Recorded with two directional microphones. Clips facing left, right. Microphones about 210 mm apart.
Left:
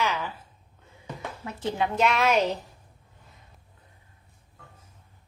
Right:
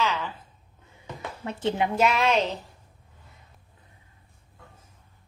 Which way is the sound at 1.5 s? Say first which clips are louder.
Right 4 dB; 25° right (ahead or behind).